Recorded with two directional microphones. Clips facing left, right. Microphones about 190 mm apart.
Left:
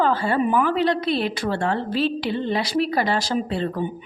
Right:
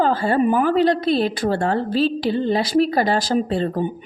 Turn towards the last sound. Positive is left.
turn(degrees=-40)  # may be behind; listen again after turning